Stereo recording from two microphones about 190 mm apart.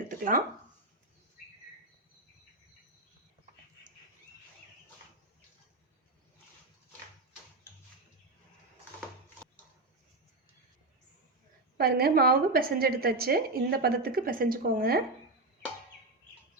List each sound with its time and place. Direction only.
0.1 s speech: 45° right (ahead or behind)
11.8 s a woman's voice: 55° right (ahead or behind)